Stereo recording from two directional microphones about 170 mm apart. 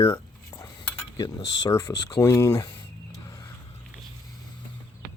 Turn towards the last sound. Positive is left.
turn(degrees=20)  # may be behind; listen again after turning